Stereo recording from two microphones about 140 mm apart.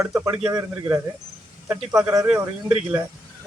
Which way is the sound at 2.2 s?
5° right (ahead or behind).